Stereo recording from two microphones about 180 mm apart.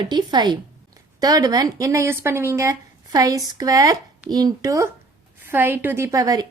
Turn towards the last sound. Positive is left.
turn(degrees=-20)  # may be behind; listen again after turning